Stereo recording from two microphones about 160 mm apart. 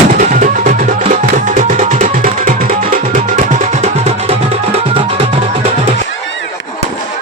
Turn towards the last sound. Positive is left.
turn(degrees=-35)  # may be behind; listen again after turning